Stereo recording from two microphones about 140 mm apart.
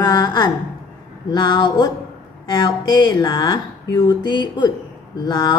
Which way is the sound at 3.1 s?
30° left (ahead or behind).